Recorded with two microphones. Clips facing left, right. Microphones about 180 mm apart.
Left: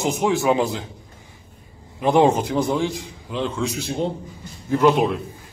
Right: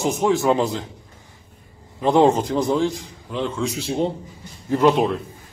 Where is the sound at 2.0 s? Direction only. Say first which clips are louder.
Right 1 dB; 15° left (ahead or behind).